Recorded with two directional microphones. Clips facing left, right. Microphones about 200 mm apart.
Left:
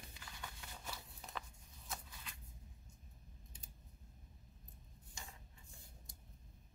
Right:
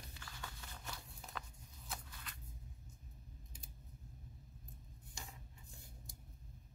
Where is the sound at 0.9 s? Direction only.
Centre (ahead or behind).